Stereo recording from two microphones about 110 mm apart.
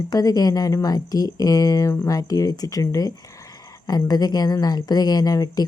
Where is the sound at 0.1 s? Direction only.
35° left (ahead or behind).